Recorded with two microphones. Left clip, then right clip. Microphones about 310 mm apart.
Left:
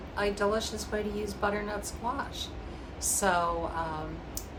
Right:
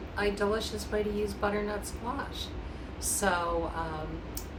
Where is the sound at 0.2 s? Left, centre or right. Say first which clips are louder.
Left 1 dB; centre.